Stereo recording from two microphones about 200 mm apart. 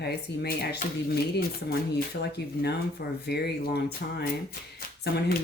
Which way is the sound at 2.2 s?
55° left (ahead or behind).